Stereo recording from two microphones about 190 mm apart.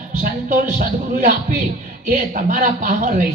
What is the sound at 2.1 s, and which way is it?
A man's voice, 45° right (ahead or behind).